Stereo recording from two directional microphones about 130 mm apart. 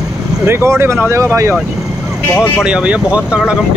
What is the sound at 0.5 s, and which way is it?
Speech, 20° right (ahead or behind).